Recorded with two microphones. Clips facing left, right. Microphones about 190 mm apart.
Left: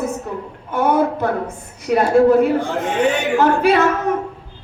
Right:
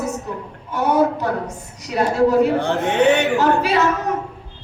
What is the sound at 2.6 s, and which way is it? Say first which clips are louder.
Speech: right 1 dB; 65° right (ahead or behind).